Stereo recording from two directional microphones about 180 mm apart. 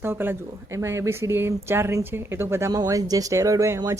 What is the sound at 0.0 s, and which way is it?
A woman's voice, 10° right (ahead or behind).